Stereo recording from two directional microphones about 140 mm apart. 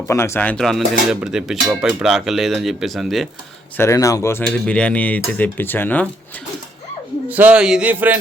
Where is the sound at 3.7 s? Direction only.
20° left (ahead or behind).